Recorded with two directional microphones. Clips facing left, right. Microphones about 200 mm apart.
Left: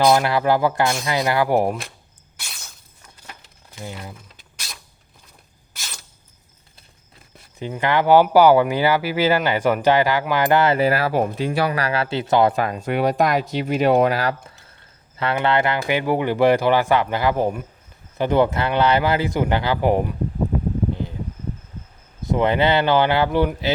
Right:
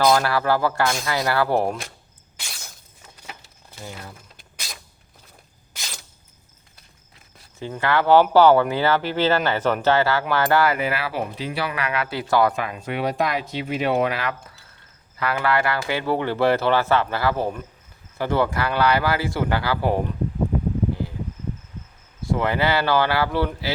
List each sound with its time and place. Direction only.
0.0 s speech: 15° left (ahead or behind)
7.6 s speech: 15° left (ahead or behind)
10.8 s speech: 40° left (ahead or behind); by 12.5 s 25° left (ahead or behind)
12.5 s speech: 40° left (ahead or behind)
15.2 s speech: 25° left (ahead or behind)
22.2 s speech: 20° left (ahead or behind)